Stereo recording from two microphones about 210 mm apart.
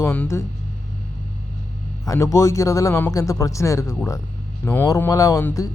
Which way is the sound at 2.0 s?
15° left (ahead or behind).